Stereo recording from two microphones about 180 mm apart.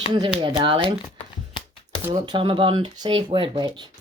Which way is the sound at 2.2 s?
25° right (ahead or behind).